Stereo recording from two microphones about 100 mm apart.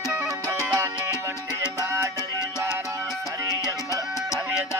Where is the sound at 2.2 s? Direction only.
30° left (ahead or behind).